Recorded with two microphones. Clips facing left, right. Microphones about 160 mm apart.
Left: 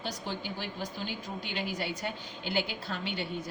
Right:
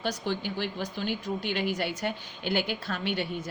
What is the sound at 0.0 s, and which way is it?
A woman's voice, 70° right (ahead or behind).